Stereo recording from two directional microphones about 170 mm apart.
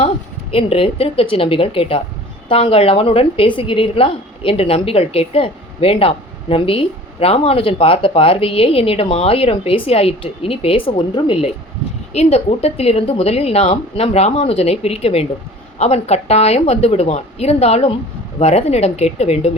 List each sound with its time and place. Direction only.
0.5 s a woman's voice: 35° left (ahead or behind)